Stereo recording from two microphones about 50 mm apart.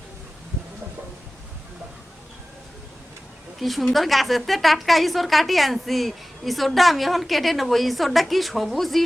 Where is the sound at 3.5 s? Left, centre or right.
Centre.